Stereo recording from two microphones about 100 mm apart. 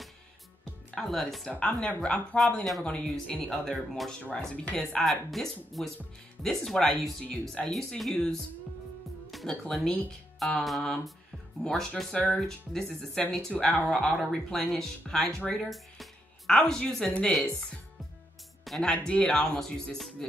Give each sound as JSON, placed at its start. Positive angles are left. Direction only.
{"t": 0.9, "sound": "speech", "side_deg": 5}
{"t": 5.0, "sound": "speech", "side_deg": 0}
{"t": 7.7, "sound": "speech", "side_deg": 0}
{"t": 18.6, "sound": "speech", "side_deg": 5}